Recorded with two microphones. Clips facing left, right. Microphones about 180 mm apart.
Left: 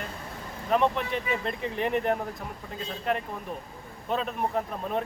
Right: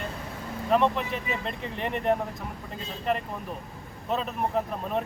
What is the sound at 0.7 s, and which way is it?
Speech, centre (ahead or behind).